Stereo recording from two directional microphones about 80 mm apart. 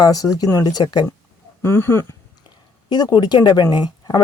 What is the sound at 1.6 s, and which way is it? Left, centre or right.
Speech, left.